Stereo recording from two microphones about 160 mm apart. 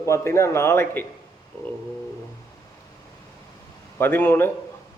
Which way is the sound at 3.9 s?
15° left (ahead or behind).